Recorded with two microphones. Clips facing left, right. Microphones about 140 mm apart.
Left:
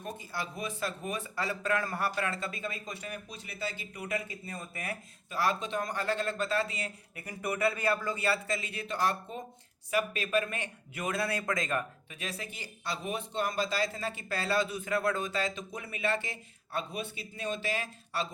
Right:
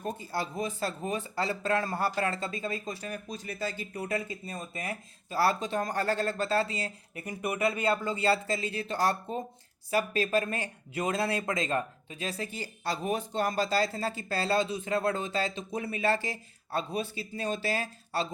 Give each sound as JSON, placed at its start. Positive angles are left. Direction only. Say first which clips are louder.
{"t": 0.0, "sound": "speech", "louder": "right 5 dB", "side_deg": -35}
{"t": 5.4, "sound": "speech", "louder": "right 3 dB", "side_deg": -40}